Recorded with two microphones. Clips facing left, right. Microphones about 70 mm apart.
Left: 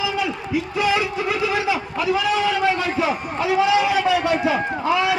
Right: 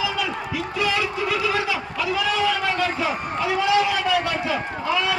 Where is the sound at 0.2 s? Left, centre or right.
Left.